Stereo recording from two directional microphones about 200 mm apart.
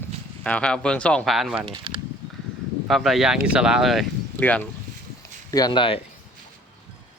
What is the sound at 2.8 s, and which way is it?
Speech, centre (ahead or behind).